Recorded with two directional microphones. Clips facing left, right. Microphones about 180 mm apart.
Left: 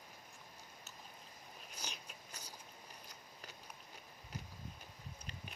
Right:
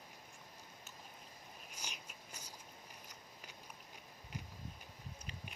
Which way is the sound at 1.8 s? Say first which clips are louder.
Left 2 dB; 10° right (ahead or behind).